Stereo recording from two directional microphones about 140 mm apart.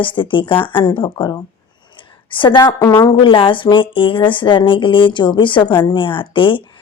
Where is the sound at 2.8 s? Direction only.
15° left (ahead or behind).